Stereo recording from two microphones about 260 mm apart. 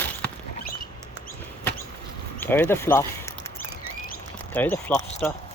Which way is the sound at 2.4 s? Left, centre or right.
Centre.